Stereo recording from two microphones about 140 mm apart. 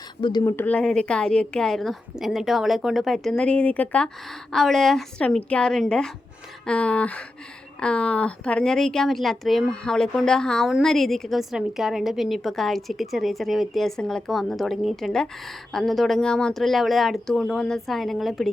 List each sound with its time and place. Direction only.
0.2 s speech: 35° left (ahead or behind)
0.4 s speech: 15° left (ahead or behind)